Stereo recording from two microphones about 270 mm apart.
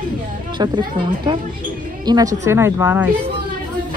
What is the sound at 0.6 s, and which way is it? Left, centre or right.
Speech, centre.